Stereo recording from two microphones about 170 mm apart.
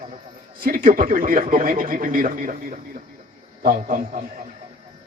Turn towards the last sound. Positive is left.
turn(degrees=-50)  # may be behind; listen again after turning